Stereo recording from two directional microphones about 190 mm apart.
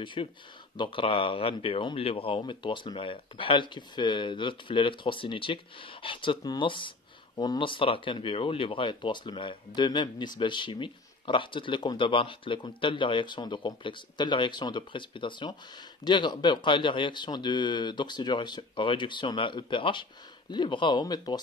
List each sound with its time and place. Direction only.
0.0 s speech: 25° left (ahead or behind)